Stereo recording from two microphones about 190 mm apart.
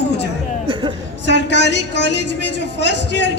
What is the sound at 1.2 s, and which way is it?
A woman's voice, 70° left (ahead or behind).